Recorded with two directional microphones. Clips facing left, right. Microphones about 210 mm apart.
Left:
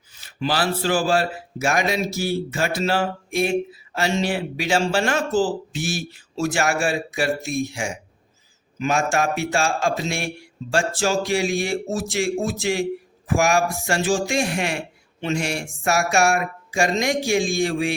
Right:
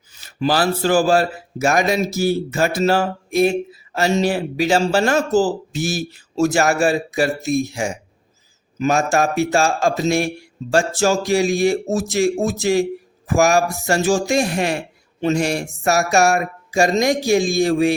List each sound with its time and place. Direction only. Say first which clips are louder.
0.1 s speech: right 5 dB; 40° right (ahead or behind)